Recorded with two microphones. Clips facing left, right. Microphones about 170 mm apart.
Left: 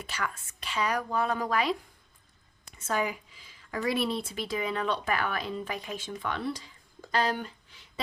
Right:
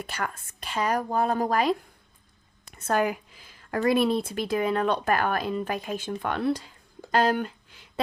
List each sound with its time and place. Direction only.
0.0 s speech: 50° right (ahead or behind)
2.6 s speech: 60° right (ahead or behind)